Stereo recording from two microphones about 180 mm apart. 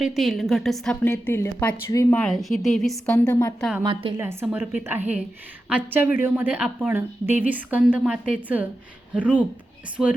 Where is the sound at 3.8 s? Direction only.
30° right (ahead or behind).